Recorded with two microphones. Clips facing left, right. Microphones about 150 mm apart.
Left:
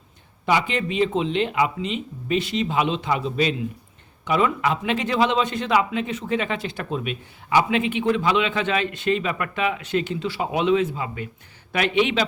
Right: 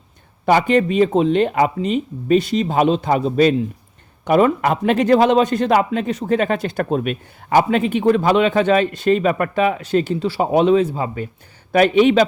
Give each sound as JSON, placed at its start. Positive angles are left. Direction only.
{"t": 0.7, "sound": "a man's voice", "side_deg": -45}